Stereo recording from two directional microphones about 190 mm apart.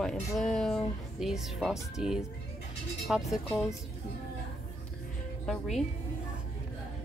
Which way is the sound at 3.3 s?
Centre (ahead or behind).